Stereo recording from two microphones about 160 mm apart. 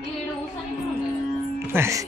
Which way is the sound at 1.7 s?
15° right (ahead or behind).